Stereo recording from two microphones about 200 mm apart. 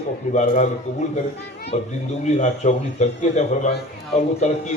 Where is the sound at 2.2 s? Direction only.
35° left (ahead or behind).